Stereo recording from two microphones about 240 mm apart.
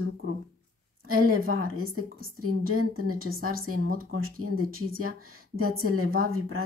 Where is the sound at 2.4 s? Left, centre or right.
Right.